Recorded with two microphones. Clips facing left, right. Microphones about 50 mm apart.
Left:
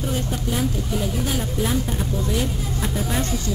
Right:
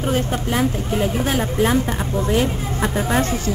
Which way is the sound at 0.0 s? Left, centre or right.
Right.